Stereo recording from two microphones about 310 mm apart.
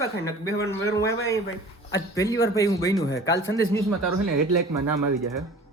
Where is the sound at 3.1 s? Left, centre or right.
Left.